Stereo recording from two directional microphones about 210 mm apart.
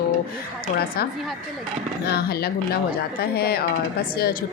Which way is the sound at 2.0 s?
50° left (ahead or behind).